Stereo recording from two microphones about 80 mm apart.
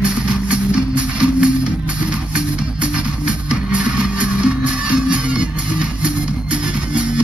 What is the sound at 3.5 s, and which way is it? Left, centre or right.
Music, centre.